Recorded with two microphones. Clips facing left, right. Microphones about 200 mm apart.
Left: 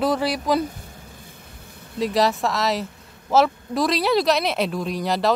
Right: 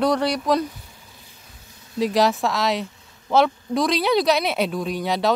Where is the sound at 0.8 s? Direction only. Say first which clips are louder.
Left 6 dB; 50° left (ahead or behind).